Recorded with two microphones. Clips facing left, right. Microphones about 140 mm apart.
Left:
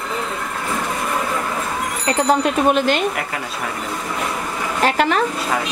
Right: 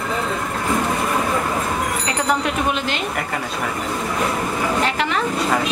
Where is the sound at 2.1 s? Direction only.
35° left (ahead or behind).